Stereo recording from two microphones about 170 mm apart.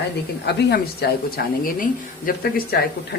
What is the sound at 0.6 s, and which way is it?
Speech, 70° left (ahead or behind).